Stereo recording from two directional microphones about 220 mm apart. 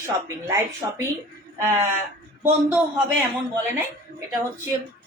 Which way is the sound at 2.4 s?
10° right (ahead or behind).